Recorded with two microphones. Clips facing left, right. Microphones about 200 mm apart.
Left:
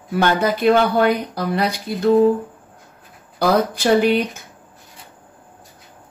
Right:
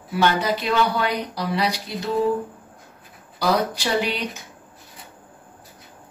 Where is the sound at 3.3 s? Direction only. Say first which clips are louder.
Left 4 dB; 50° left (ahead or behind).